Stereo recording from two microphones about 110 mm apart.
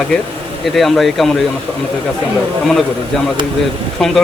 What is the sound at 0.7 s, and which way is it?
Speech, centre (ahead or behind).